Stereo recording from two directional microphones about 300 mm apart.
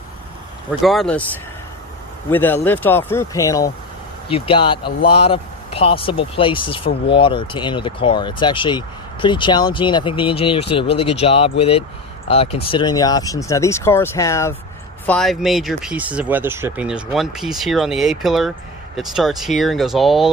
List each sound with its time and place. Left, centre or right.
0.7 s speech: centre